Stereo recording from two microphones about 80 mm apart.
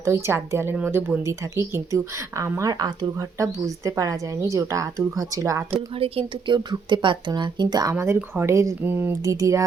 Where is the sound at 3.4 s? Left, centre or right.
Right.